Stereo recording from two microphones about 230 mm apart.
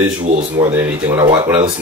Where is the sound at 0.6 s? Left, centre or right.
Centre.